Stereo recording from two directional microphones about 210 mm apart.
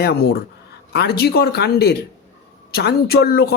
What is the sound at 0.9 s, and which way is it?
Speech, 50° left (ahead or behind).